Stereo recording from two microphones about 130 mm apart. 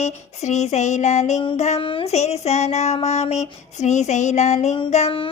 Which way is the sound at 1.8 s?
45° left (ahead or behind).